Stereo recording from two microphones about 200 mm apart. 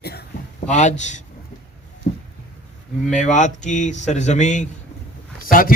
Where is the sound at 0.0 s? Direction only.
55° left (ahead or behind).